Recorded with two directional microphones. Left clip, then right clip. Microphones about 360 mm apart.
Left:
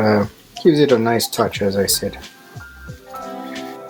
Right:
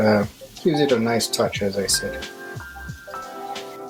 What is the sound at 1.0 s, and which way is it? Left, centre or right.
Speech, left.